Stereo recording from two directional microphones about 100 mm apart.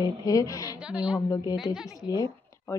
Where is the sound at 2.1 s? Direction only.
35° left (ahead or behind).